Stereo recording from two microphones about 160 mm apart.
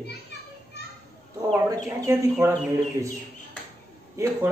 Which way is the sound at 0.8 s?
90° left.